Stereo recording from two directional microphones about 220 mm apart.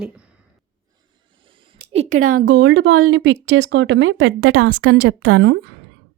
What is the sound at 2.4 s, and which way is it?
A woman's voice, 55° right (ahead or behind).